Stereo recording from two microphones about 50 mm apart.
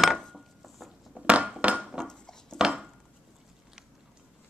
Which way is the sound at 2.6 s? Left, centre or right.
Centre.